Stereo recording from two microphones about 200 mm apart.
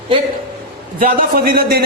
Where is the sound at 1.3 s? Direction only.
50° right (ahead or behind).